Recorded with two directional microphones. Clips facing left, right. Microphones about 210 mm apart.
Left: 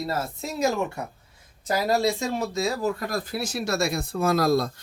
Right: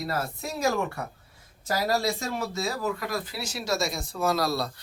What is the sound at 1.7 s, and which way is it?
Speech, 20° left (ahead or behind).